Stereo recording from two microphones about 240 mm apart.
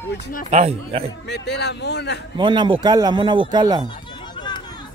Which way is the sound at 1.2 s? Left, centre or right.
Left.